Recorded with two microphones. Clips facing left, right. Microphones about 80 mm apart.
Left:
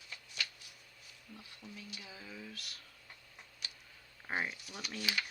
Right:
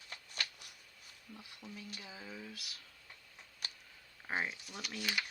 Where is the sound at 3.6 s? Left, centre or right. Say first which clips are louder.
Right 2 dB; right.